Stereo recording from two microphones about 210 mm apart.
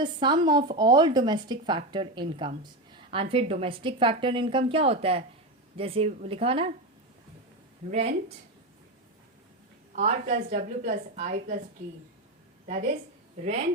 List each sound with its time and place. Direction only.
0.0 s a woman's voice: 20° right (ahead or behind)
7.9 s a woman's voice: 35° right (ahead or behind)
9.9 s a woman's voice: 35° right (ahead or behind)
13.4 s a woman's voice: 30° right (ahead or behind)